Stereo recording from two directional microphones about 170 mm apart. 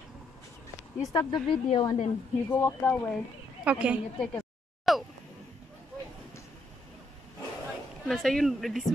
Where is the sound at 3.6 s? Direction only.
5° right (ahead or behind).